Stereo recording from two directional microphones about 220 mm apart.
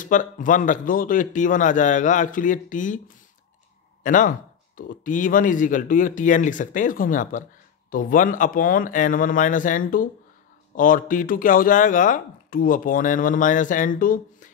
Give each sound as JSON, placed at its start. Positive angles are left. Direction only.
{"t": 0.0, "sound": "speech", "side_deg": 35}
{"t": 4.0, "sound": "speech", "side_deg": 35}